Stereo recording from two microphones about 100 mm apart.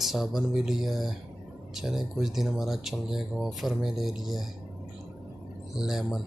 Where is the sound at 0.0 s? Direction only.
5° right (ahead or behind).